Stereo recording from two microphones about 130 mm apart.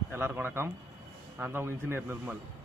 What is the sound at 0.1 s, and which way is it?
A man's voice, 15° right (ahead or behind).